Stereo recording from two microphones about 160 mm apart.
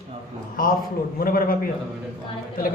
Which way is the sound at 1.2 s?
65° left (ahead or behind).